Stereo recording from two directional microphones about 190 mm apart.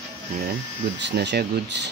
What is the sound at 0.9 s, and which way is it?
Speech, 65° right (ahead or behind).